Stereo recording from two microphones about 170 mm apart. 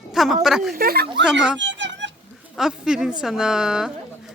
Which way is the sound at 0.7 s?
60° right (ahead or behind).